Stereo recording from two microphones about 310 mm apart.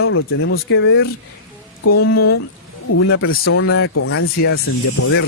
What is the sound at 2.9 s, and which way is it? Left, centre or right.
Speech, left.